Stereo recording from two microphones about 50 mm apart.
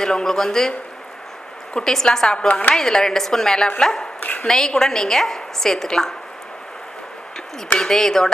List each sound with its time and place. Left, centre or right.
0.0 s a woman's voice: centre
2.5 s a woman's voice: left
2.7 s a woman's voice: centre
4.2 s speech: left
4.4 s a woman's voice: centre
7.8 s a woman's voice: centre